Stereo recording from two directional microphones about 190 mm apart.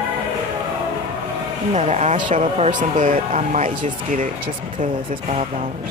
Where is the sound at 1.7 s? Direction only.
35° right (ahead or behind).